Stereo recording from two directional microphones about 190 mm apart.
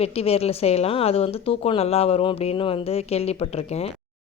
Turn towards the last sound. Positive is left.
turn(degrees=35)  # may be behind; listen again after turning